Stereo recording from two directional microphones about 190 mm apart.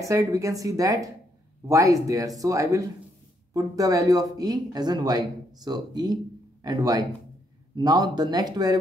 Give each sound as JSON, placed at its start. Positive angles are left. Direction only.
{"t": 0.0, "sound": "a woman's voice", "side_deg": -15}